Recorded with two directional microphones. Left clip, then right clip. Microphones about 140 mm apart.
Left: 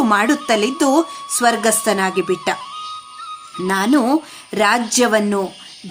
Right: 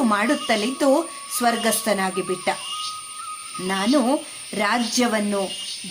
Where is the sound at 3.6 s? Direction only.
30° left (ahead or behind).